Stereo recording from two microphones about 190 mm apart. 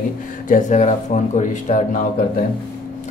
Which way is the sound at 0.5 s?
40° left (ahead or behind).